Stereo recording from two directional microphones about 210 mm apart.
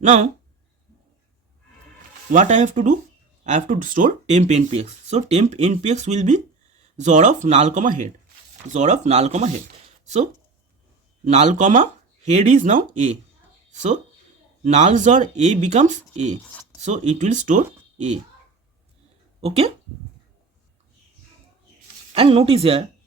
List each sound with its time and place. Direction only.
0.0 s speech: 35° right (ahead or behind)
2.3 s speech: 35° right (ahead or behind)
11.3 s speech: 35° right (ahead or behind)
19.4 s speech: 30° right (ahead or behind)
22.1 s speech: 25° right (ahead or behind)